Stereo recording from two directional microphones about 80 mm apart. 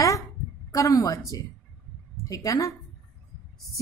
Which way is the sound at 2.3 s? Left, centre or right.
Left.